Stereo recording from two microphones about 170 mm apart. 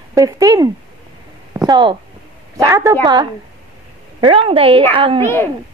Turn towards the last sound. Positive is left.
turn(degrees=15)  # may be behind; listen again after turning